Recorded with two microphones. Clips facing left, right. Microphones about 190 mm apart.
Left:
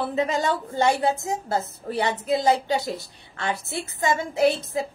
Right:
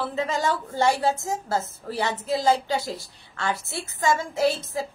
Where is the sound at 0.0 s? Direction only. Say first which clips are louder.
Left 2 dB; 20° left (ahead or behind).